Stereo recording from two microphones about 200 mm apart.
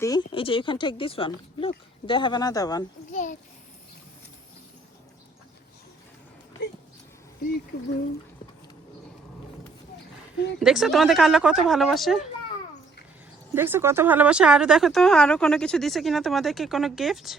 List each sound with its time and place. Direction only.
0.0 s speech: 20° left (ahead or behind)
3.1 s a child's voice: 40° left (ahead or behind)
10.6 s speech: centre (ahead or behind)
13.5 s speech: 10° right (ahead or behind)